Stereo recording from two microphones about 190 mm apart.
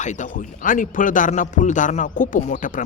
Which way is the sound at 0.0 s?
40° left (ahead or behind).